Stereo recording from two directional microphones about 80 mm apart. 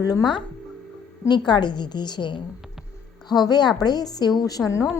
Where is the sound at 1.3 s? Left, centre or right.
Left.